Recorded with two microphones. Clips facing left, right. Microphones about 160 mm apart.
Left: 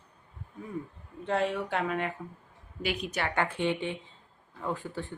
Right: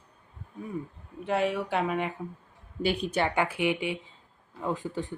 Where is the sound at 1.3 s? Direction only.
10° right (ahead or behind).